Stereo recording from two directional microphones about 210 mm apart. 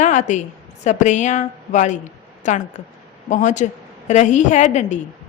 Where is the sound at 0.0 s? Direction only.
35° left (ahead or behind).